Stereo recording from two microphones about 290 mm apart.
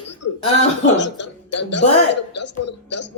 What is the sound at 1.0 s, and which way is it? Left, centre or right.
Speech, left.